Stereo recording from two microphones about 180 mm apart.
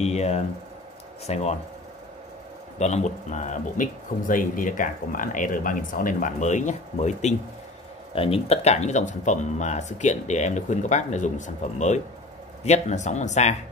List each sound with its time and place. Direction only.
0.0 s speech: 35° left (ahead or behind)
2.8 s speech: 40° left (ahead or behind)